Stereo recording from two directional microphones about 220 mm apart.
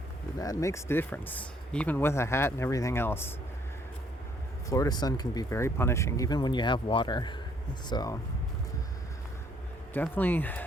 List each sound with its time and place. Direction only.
0.3 s speech: 15° left (ahead or behind)
4.7 s speech: 15° left (ahead or behind)
9.9 s speech: 10° left (ahead or behind)